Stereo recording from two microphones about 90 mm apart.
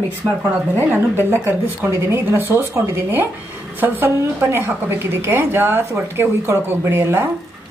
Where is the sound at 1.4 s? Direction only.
25° right (ahead or behind).